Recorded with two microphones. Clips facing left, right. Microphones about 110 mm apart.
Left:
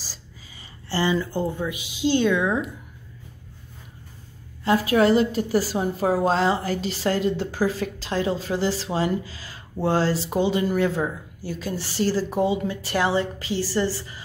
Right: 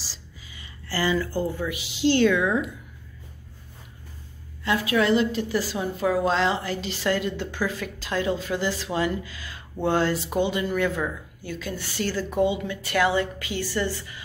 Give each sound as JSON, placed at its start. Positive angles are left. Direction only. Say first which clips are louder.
{"t": 0.0, "sound": "a sound", "louder": "even", "side_deg": 45}
{"t": 0.8, "sound": "speech", "louder": "left 2 dB", "side_deg": 25}
{"t": 4.6, "sound": "a woman's voice", "louder": "left 4 dB", "side_deg": 40}